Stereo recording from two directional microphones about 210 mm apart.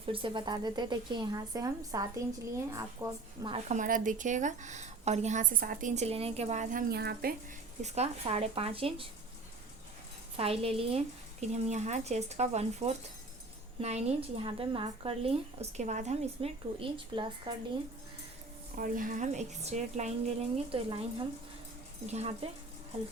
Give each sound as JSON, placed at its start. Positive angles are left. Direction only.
{"t": 0.0, "sound": "a woman's voice", "side_deg": -25}
{"t": 3.5, "sound": "a woman's voice", "side_deg": -35}
{"t": 7.8, "sound": "a woman's voice", "side_deg": -30}
{"t": 10.3, "sound": "a woman's voice", "side_deg": -25}
{"t": 18.8, "sound": "a woman's voice", "side_deg": -40}
{"t": 22.0, "sound": "a woman's voice", "side_deg": -30}